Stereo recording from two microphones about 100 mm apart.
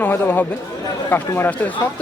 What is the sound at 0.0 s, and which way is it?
Speech, 15° left (ahead or behind).